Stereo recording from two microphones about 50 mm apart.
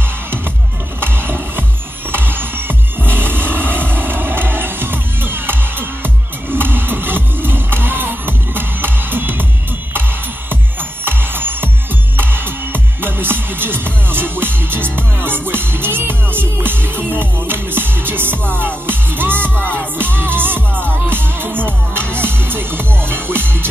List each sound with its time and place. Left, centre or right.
1.0 s music: right
10.5 s music: right